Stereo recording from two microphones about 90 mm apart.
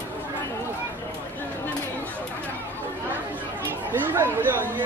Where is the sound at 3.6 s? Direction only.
25° right (ahead or behind).